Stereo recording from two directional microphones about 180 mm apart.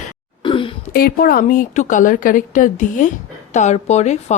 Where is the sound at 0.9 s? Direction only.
55° left (ahead or behind).